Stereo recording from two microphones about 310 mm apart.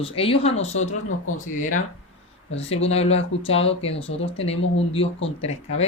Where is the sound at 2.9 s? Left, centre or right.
Centre.